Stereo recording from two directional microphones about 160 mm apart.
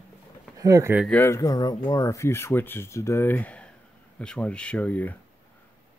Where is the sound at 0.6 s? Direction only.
20° right (ahead or behind).